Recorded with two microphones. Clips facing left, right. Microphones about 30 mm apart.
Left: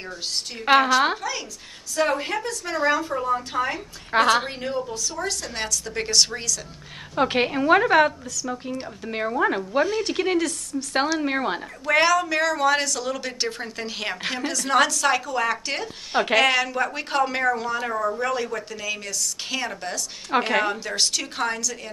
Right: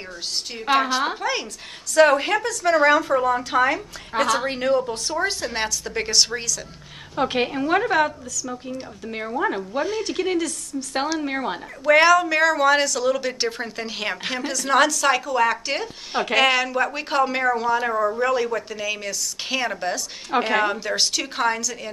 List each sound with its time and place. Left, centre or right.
0.7 s a woman's voice: centre
2.0 s a woman's voice: right
4.1 s a woman's voice: left
4.5 s a woman's voice: right
4.8 s a woman's voice: right
5.2 s a woman's voice: right
7.2 s a woman's voice: centre
11.8 s a woman's voice: centre
20.2 s a woman's voice: centre